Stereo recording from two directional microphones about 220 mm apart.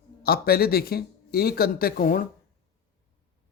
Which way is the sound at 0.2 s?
45° left (ahead or behind).